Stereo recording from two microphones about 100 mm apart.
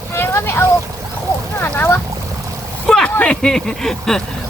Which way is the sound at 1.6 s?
20° left (ahead or behind).